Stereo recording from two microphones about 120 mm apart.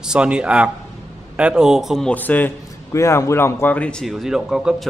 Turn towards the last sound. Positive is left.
turn(degrees=-5)  # may be behind; listen again after turning